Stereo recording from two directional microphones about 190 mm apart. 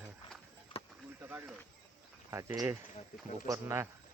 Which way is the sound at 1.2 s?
15° right (ahead or behind).